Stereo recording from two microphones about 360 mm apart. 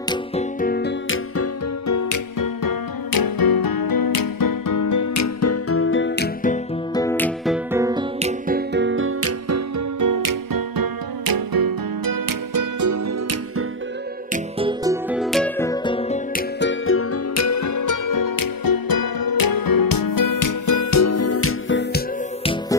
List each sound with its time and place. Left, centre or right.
0.1 s music: centre
6.9 s music: centre; by 13.7 s right
14.3 s music: centre
16.5 s music: left
22.4 s music: centre